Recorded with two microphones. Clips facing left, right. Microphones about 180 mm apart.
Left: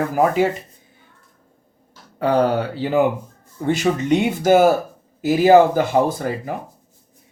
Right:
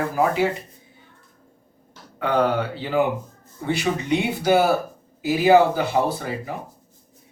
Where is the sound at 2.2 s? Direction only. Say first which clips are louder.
Left 3 dB; 35° left (ahead or behind).